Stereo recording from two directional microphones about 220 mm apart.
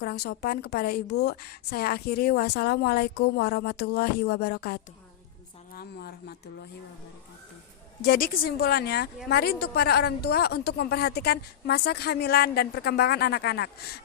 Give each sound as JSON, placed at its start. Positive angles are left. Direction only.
{"t": 0.0, "sound": "a woman's voice", "side_deg": 45}
{"t": 8.0, "sound": "a woman's voice", "side_deg": 40}